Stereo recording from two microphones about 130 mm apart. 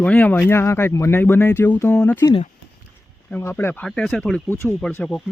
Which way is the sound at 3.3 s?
20° left (ahead or behind).